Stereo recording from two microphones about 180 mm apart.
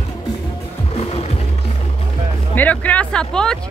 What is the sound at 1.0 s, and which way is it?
Music, 35° left (ahead or behind).